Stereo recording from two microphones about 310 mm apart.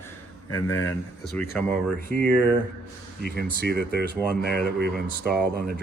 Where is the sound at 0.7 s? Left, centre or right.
Centre.